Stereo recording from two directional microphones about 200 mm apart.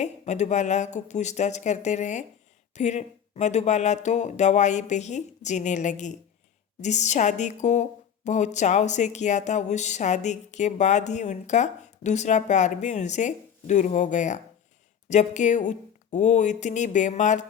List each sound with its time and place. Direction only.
0.0 s a woman's voice: 35° left (ahead or behind)